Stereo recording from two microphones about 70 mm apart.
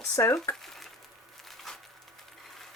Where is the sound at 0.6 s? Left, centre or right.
Centre.